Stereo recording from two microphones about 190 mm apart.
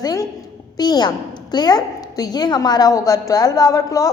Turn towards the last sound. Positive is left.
turn(degrees=15)  # may be behind; listen again after turning